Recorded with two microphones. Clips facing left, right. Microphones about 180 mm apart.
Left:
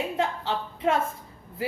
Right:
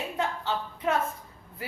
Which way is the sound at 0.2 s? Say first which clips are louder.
Right 1 dB; 25° left (ahead or behind).